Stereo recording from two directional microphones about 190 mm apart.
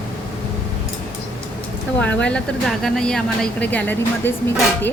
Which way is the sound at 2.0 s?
5° left (ahead or behind).